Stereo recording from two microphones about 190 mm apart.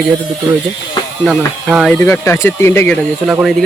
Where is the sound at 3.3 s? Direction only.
5° right (ahead or behind).